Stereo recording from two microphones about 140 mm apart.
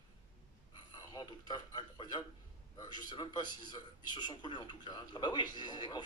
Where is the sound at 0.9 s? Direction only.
30° left (ahead or behind).